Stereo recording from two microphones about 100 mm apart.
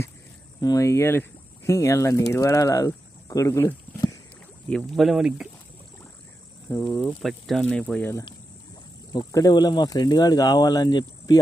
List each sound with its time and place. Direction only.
0.6 s speech: 35° left (ahead or behind)
4.7 s speech: centre (ahead or behind)
6.8 s speech: 15° left (ahead or behind)
7.2 s speech: centre (ahead or behind)
9.1 s speech: 40° left (ahead or behind)